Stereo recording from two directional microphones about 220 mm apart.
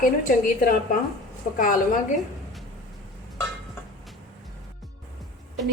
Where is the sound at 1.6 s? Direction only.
40° left (ahead or behind).